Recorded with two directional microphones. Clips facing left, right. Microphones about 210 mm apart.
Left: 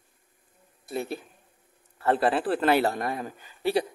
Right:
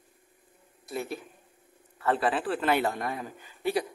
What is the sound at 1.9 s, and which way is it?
A man's voice, 35° left (ahead or behind).